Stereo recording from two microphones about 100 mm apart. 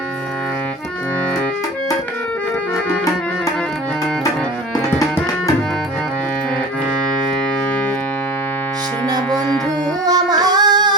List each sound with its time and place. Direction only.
10.1 s female singing: 40° right (ahead or behind)